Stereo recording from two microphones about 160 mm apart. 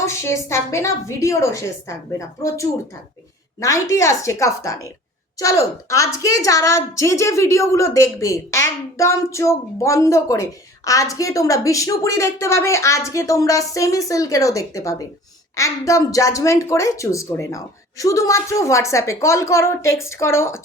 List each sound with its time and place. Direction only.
0.0 s a woman's voice: 15° left (ahead or behind)